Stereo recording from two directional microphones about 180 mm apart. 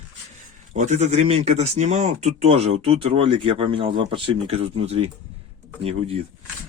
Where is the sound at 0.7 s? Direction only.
40° right (ahead or behind).